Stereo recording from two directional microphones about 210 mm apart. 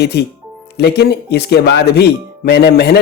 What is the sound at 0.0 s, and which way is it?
Speech, 50° left (ahead or behind).